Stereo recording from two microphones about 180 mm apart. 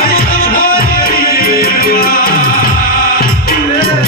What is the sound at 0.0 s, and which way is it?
Music, 55° left (ahead or behind).